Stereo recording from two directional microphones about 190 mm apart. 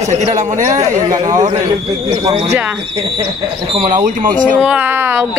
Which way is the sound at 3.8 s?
40° right (ahead or behind).